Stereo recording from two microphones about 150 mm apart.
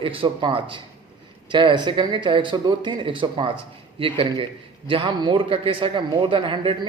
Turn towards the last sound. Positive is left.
turn(degrees=-35)  # may be behind; listen again after turning